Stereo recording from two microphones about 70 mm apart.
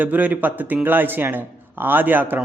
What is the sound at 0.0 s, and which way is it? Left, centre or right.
A man's voice, right.